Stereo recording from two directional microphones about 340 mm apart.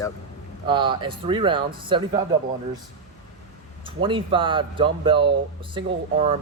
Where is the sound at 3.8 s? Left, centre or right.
Centre.